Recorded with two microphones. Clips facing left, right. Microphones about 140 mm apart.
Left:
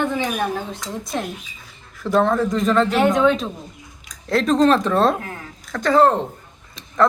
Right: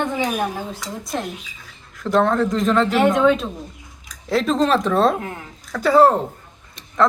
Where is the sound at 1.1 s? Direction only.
Centre (ahead or behind).